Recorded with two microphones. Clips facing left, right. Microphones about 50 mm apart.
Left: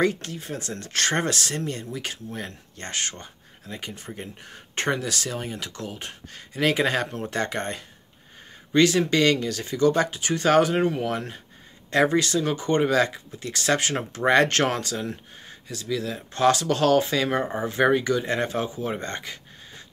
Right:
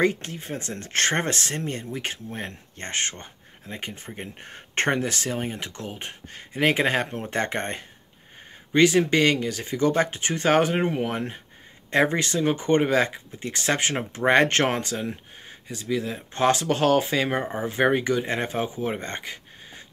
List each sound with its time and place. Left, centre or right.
0.0 s speech: right
8.7 s speech: right